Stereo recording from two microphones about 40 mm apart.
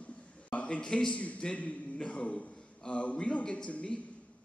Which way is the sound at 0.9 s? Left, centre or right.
Left.